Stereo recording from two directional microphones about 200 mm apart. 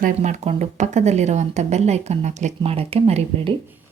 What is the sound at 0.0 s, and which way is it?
Speech, 35° right (ahead or behind).